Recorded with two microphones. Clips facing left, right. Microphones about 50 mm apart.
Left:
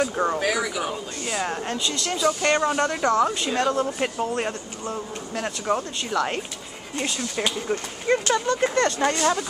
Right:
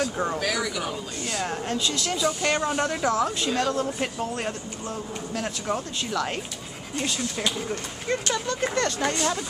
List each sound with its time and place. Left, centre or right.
0.0 s speech: centre
8.5 s speech: centre
9.2 s speech: centre